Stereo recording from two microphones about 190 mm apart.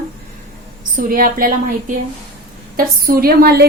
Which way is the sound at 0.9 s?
50° right (ahead or behind).